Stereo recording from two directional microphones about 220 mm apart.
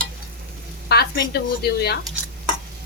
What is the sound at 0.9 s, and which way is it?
Sizzle, 45° left (ahead or behind).